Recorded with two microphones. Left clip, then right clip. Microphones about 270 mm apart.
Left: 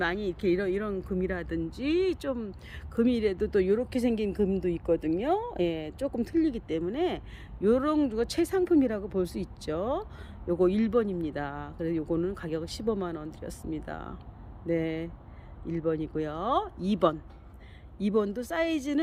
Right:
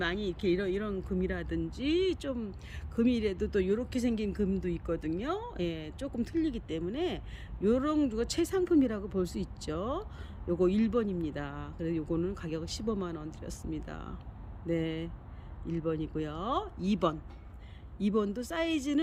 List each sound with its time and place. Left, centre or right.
0.0 s speech: centre